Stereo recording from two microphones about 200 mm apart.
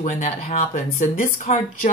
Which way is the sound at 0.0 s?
35° left (ahead or behind).